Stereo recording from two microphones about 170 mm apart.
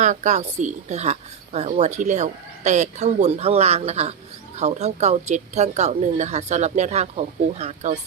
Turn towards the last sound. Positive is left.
turn(degrees=-40)  # may be behind; listen again after turning